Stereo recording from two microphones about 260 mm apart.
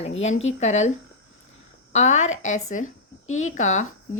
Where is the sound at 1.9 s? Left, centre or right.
Left.